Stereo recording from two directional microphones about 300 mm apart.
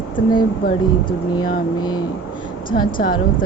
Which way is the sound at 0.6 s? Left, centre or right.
Left.